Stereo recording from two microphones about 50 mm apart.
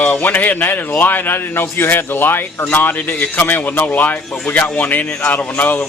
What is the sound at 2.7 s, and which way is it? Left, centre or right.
Speech, left.